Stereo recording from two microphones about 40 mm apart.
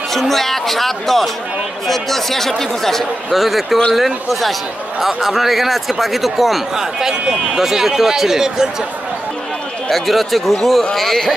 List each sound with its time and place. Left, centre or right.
0.1 s speech: centre
6.8 s a man's voice: centre
9.8 s speech: centre